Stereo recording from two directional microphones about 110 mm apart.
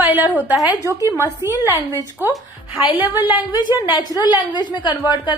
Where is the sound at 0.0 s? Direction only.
15° right (ahead or behind).